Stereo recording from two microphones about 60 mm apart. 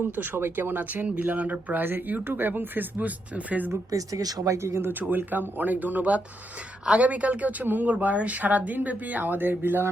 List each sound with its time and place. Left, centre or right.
0.2 s speech: right
3.9 s speech: right
4.5 s speech: right